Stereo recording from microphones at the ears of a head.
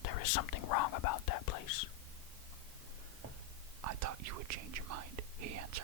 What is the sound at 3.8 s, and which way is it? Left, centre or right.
Whispering, right.